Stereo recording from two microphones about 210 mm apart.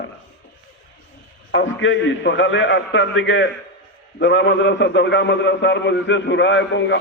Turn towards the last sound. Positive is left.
turn(degrees=55)  # may be behind; listen again after turning